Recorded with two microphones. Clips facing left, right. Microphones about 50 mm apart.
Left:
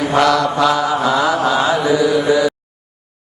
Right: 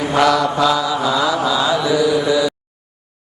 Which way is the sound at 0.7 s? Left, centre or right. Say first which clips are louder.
Left 2 dB; left.